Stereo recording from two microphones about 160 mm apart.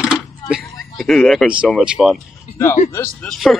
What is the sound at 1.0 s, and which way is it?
Speech, centre (ahead or behind).